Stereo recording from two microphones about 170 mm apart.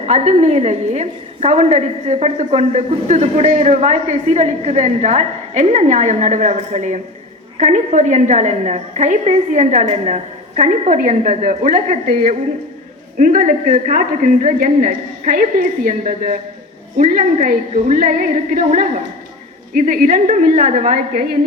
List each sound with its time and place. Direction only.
0.0 s a woman's voice: 40° right (ahead or behind)